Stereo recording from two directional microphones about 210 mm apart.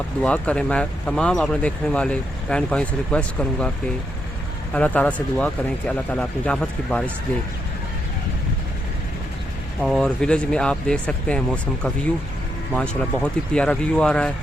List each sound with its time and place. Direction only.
0.2 s speech: 5° left (ahead or behind)
4.7 s speech: 5° left (ahead or behind)
9.8 s speech: centre (ahead or behind)